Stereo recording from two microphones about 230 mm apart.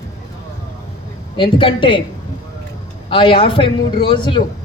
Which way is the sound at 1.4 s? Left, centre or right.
Left.